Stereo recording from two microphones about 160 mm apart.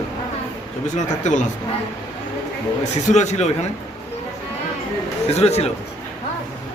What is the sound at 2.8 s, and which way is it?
Speech, 45° left (ahead or behind).